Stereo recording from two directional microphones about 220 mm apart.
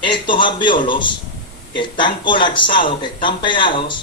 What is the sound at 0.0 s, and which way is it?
Speech, 20° left (ahead or behind).